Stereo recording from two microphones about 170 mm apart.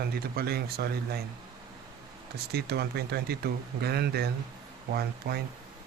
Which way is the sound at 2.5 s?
70° right (ahead or behind).